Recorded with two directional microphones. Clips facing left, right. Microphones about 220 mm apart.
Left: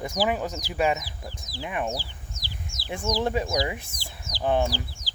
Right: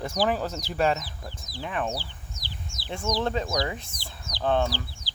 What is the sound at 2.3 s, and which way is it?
Chicken, 45° left (ahead or behind).